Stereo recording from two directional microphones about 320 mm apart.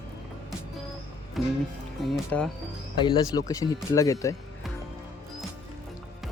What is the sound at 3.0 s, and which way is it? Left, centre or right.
Speech, centre.